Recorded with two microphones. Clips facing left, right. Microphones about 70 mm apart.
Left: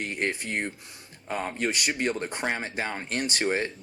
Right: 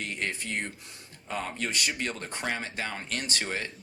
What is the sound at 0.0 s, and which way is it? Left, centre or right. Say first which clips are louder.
Speech: left 4 dB; left.